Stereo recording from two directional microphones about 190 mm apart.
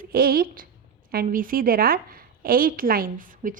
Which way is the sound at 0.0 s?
50° right (ahead or behind).